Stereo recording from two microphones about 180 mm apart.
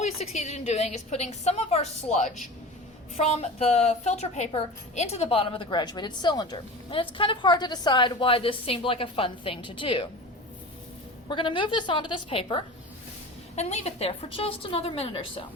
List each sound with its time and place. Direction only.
0.0 s a woman's voice: 40° left (ahead or behind)
11.3 s a woman's voice: 25° left (ahead or behind)